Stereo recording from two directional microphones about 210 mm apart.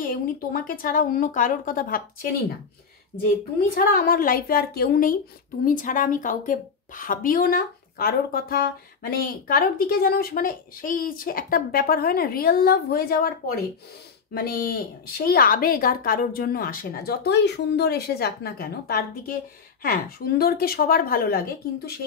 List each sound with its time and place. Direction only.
0.0 s speech: 45° left (ahead or behind)
3.7 s a woman's voice: 45° left (ahead or behind)